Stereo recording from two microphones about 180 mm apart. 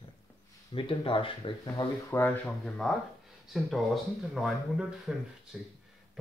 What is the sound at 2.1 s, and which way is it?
Speech, 10° left (ahead or behind).